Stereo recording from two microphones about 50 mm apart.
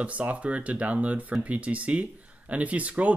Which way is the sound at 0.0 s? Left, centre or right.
Right.